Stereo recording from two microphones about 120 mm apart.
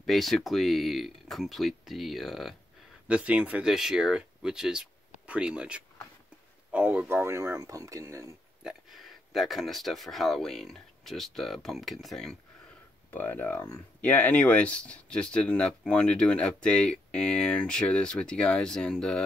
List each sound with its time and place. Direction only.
0.0 s speech: centre (ahead or behind)
7.2 s speech: 20° right (ahead or behind)
8.6 s speech: centre (ahead or behind)
13.1 s speech: 15° left (ahead or behind)